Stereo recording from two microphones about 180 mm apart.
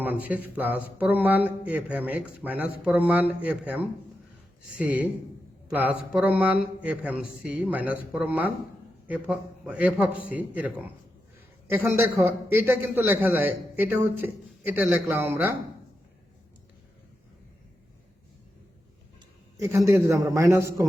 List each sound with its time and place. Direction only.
0.0 s a man's voice: 10° right (ahead or behind)
11.7 s a man's voice: 15° right (ahead or behind)
19.5 s a man's voice: 15° right (ahead or behind)